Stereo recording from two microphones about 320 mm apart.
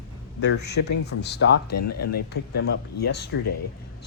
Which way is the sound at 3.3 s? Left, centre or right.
Left.